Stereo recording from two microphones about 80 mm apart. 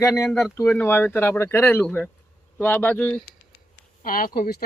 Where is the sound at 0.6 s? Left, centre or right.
Left.